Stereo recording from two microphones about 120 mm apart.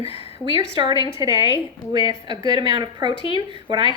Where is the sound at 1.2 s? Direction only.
30° right (ahead or behind).